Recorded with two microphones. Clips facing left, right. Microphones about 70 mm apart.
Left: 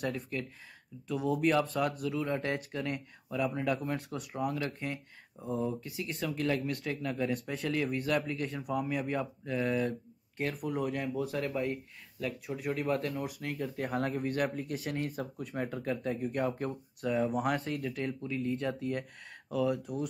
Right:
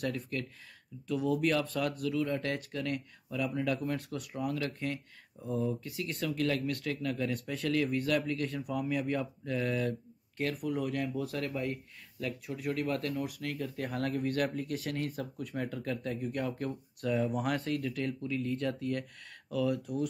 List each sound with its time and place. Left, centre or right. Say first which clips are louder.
0.0 s speech: even; centre